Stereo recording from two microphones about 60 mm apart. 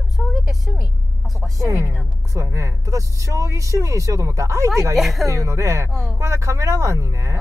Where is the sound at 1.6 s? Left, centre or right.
Right.